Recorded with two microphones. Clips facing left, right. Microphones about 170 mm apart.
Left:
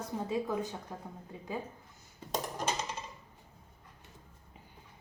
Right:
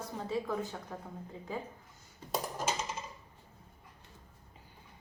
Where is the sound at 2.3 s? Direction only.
5° right (ahead or behind).